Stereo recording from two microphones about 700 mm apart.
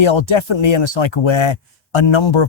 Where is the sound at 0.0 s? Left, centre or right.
Left.